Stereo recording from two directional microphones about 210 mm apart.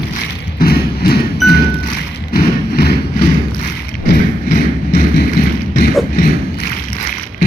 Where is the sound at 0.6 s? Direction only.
45° left (ahead or behind).